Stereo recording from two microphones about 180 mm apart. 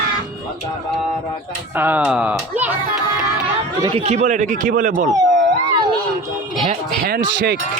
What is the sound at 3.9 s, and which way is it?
Speech, 40° right (ahead or behind).